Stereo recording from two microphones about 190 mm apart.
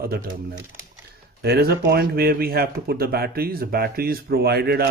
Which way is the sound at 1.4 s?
55° right (ahead or behind).